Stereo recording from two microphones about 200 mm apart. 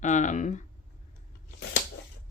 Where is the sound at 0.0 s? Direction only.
40° left (ahead or behind).